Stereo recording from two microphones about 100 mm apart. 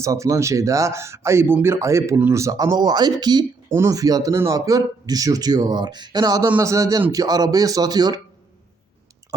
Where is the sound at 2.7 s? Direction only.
45° right (ahead or behind).